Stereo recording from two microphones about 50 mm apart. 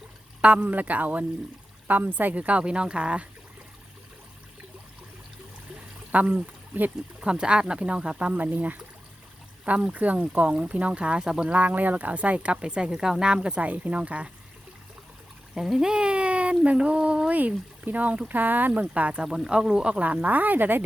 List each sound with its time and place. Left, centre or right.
0.4 s speech: right
6.1 s speech: right
7.2 s speech: centre
11.5 s speech: right
15.5 s speech: centre
17.3 s speech: right
19.2 s speech: centre
20.2 s speech: right